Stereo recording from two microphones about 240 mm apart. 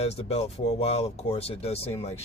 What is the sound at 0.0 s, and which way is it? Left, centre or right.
Speech, left.